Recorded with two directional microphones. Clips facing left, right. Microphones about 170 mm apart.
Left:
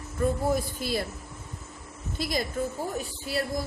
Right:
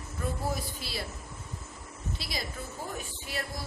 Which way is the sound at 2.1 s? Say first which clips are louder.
Left 11 dB; 50° left (ahead or behind).